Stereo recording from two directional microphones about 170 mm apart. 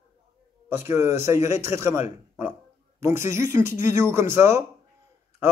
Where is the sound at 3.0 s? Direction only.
15° right (ahead or behind).